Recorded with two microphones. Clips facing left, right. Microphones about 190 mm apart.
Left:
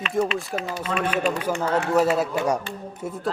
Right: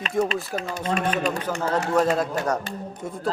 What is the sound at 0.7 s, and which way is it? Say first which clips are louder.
Speech: right 4 dB; 40° right (ahead or behind).